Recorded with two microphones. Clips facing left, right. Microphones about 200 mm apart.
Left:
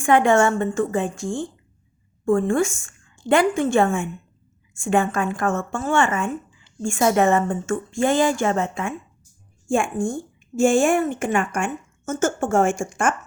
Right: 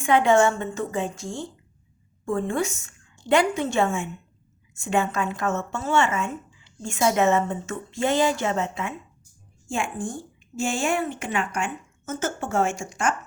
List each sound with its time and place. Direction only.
0.0 s a woman's voice: 50° left (ahead or behind)